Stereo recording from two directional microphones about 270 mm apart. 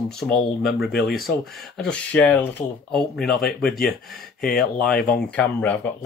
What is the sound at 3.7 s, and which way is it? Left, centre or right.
Speech, left.